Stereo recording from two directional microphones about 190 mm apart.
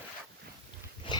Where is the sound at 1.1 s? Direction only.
25° left (ahead or behind).